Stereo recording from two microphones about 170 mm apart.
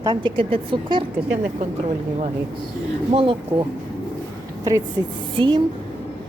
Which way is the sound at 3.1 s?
30° right (ahead or behind).